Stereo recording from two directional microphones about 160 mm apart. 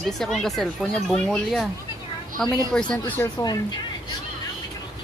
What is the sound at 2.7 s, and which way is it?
Speech, 5° left (ahead or behind).